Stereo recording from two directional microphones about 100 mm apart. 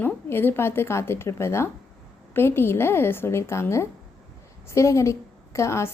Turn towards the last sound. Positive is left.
turn(degrees=30)  # may be behind; listen again after turning